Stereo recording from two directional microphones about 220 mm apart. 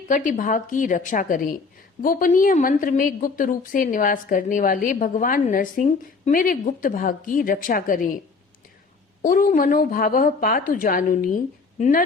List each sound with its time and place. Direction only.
0.1 s a woman's voice: 35° left (ahead or behind)
9.2 s a woman's voice: 40° left (ahead or behind)